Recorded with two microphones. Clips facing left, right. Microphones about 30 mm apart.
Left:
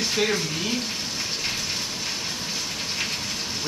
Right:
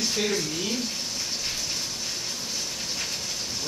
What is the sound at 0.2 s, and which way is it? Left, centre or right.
Speech, left.